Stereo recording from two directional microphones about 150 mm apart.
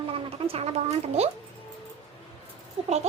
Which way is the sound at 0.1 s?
40° right (ahead or behind).